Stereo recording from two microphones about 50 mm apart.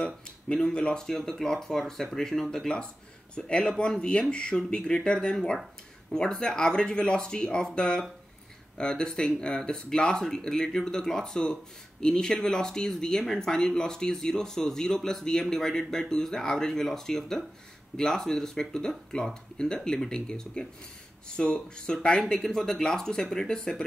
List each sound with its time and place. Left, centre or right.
0.7 s speech: centre